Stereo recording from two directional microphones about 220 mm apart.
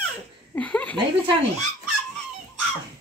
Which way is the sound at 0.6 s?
5° left (ahead or behind).